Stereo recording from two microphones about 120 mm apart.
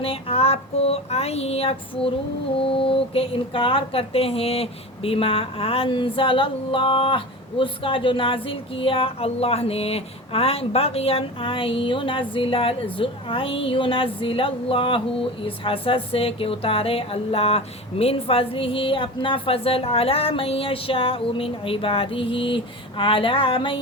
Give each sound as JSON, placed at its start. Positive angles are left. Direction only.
{"t": 0.0, "sound": "child singing", "side_deg": 50}
{"t": 2.6, "sound": "a woman's voice", "side_deg": 50}